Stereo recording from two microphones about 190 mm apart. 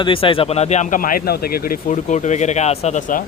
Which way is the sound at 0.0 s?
30° left (ahead or behind).